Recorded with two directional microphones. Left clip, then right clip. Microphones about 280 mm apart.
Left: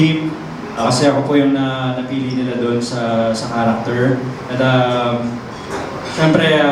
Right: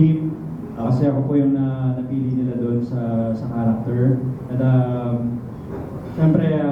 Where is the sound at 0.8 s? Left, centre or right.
Centre.